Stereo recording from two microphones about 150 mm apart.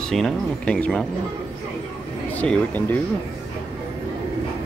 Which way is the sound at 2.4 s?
10° left (ahead or behind).